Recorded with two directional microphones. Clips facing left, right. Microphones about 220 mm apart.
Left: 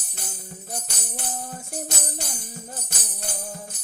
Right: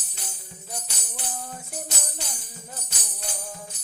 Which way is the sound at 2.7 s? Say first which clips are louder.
Left 3 dB; 50° left (ahead or behind).